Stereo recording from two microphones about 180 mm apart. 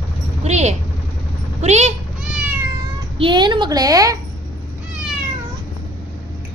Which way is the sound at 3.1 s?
25° right (ahead or behind).